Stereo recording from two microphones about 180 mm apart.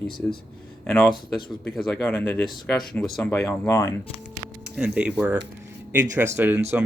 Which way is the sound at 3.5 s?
15° left (ahead or behind).